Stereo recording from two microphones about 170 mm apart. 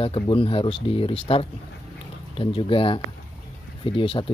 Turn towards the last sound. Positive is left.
turn(degrees=30)  # may be behind; listen again after turning